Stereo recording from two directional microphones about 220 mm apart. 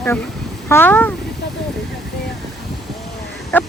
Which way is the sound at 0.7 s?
10° left (ahead or behind).